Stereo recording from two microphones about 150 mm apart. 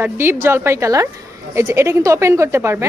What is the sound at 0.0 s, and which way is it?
A woman's voice, 15° right (ahead or behind).